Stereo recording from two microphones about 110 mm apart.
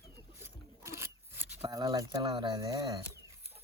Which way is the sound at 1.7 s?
35° right (ahead or behind).